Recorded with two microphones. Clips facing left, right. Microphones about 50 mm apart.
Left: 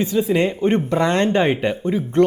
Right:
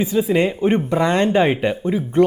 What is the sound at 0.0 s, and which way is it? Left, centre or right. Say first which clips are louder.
Speech: right 1 dB; centre.